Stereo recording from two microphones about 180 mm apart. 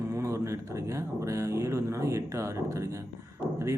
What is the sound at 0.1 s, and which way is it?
Speech, 15° right (ahead or behind).